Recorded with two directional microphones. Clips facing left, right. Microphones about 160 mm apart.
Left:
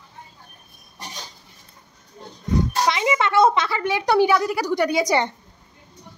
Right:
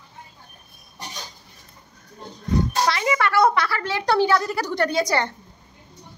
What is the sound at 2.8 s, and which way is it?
A woman's voice, 20° left (ahead or behind).